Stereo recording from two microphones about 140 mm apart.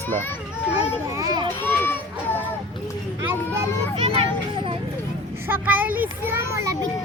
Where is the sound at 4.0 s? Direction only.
40° right (ahead or behind).